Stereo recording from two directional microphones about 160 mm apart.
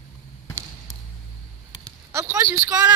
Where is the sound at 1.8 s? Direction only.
15° right (ahead or behind).